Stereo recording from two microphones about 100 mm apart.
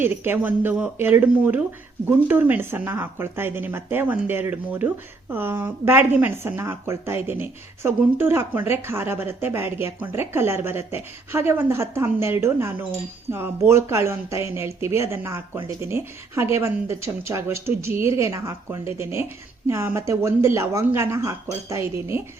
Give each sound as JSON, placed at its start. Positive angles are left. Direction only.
{"t": 0.0, "sound": "a woman's voice", "side_deg": -20}